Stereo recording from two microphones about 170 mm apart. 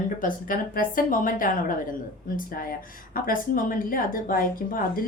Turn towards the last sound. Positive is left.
turn(degrees=55)  # may be behind; listen again after turning